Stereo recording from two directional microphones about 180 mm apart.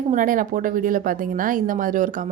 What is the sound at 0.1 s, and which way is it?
Speech, 50° right (ahead or behind).